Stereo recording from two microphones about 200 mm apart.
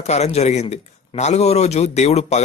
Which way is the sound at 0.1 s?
35° left (ahead or behind).